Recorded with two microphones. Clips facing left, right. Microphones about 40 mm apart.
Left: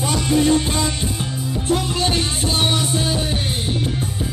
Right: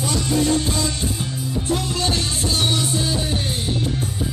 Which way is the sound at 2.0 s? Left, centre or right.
Left.